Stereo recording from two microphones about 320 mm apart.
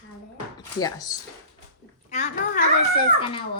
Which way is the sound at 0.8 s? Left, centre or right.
Centre.